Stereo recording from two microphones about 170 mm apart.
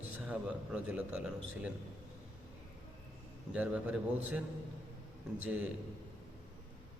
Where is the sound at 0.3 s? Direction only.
10° right (ahead or behind).